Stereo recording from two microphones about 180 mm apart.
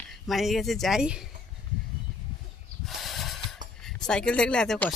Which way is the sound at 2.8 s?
Centre (ahead or behind).